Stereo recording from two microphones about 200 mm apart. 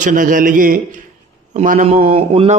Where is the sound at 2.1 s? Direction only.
30° right (ahead or behind).